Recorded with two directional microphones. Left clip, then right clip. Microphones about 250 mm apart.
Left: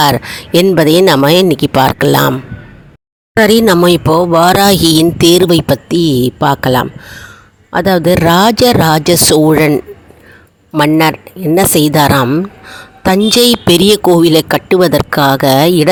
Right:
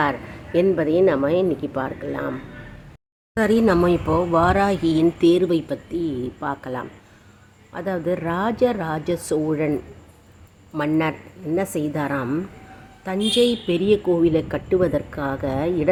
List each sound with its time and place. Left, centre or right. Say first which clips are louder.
0.0 s speech: left 12 dB; left